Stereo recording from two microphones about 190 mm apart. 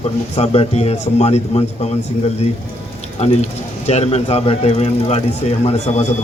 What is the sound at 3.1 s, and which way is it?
Speech, 35° left (ahead or behind).